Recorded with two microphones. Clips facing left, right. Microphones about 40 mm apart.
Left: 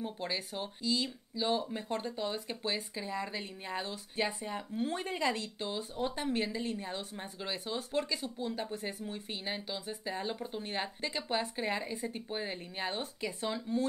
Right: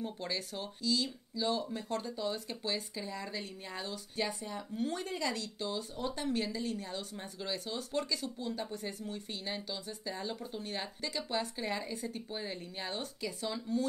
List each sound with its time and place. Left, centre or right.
0.0 s speech: centre